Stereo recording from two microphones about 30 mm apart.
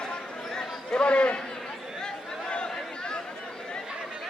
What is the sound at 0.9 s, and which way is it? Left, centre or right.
Speech, left.